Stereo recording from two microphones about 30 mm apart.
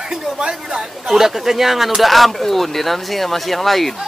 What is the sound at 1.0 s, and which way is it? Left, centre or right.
Speech, centre.